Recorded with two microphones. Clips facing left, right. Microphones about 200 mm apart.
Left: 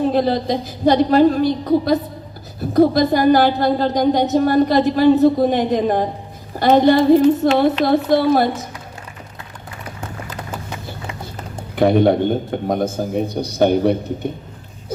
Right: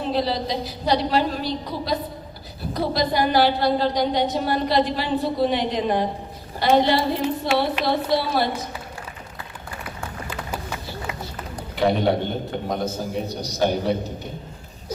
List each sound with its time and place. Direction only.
0.0 s a woman's voice: 50° left (ahead or behind)
11.8 s a woman's voice: 50° left (ahead or behind)